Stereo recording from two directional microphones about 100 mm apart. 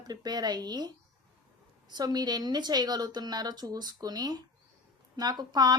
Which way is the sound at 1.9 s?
45° right (ahead or behind).